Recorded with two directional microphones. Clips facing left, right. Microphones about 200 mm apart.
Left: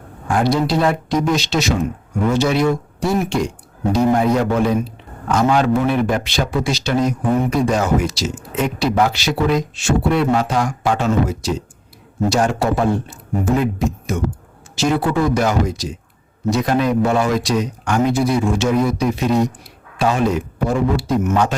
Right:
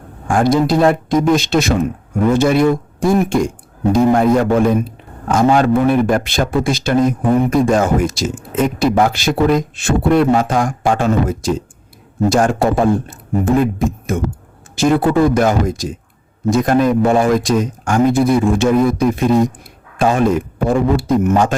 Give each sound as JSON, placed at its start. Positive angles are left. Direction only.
{"t": 0.3, "sound": "a man's voice", "side_deg": -50}